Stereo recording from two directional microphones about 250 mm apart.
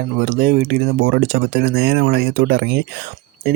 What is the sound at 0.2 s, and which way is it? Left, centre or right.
Speech, right.